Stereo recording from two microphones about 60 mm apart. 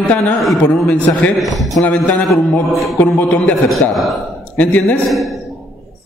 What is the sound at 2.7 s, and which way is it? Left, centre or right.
Speech, centre.